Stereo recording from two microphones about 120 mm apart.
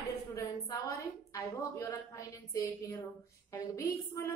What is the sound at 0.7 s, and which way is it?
A woman's voice, 25° left (ahead or behind).